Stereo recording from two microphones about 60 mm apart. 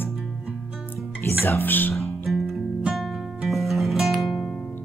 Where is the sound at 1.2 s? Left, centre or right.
Left.